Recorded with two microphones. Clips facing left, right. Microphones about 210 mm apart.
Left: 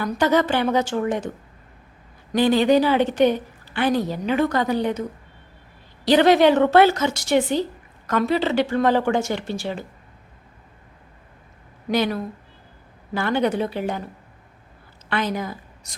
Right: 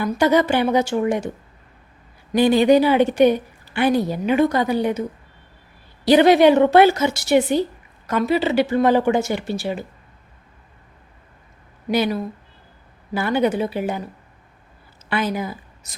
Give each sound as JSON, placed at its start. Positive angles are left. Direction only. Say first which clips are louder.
{"t": 0.0, "sound": "a woman's voice", "louder": "right 2 dB", "side_deg": -10}
{"t": 2.3, "sound": "a woman's voice", "louder": "right 3 dB", "side_deg": -10}
{"t": 6.1, "sound": "a woman's voice", "louder": "right 3 dB", "side_deg": -10}
{"t": 11.9, "sound": "a woman's voice", "louder": "right 2 dB", "side_deg": -10}
{"t": 15.1, "sound": "a woman's voice", "louder": "right 2 dB", "side_deg": -10}